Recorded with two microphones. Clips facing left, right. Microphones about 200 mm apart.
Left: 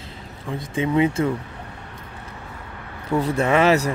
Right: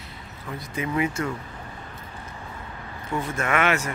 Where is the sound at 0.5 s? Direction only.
25° left (ahead or behind).